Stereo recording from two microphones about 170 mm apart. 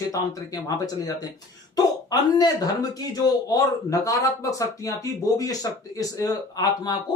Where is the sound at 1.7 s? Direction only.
25° left (ahead or behind).